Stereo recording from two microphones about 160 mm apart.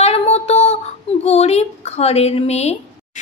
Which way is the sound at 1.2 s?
40° left (ahead or behind).